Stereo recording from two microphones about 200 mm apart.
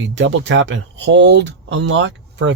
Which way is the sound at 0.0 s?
65° right (ahead or behind).